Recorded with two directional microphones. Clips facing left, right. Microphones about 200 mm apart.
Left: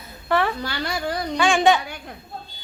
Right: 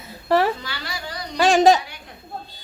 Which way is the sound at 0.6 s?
50° left (ahead or behind).